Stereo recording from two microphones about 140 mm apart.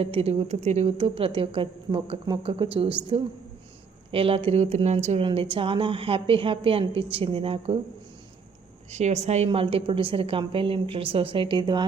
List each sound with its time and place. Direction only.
0.0 s speech: 45° right (ahead or behind)
5.2 s speech: 40° right (ahead or behind)
8.9 s speech: 55° right (ahead or behind); by 11.9 s 30° right (ahead or behind)